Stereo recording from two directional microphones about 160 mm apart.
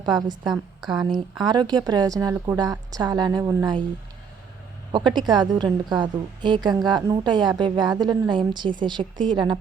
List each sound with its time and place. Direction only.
0.0 s a woman's voice: 25° right (ahead or behind)
4.9 s a woman's voice: 30° right (ahead or behind)